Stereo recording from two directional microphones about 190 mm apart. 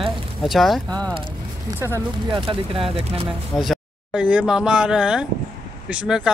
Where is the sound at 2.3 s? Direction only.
30° right (ahead or behind).